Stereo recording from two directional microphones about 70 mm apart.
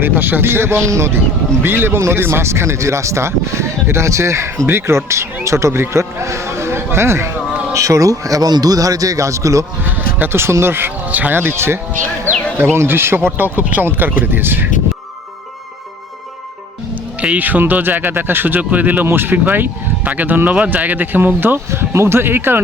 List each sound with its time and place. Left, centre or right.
0.0 s speech: right
7.7 s speech: right
9.8 s speech: right
12.3 s a sound: left
12.7 s speech: right
13.3 s speech: right
17.2 s speech: right